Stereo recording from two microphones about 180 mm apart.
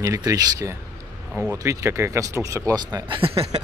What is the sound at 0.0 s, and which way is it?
Speech, 15° right (ahead or behind).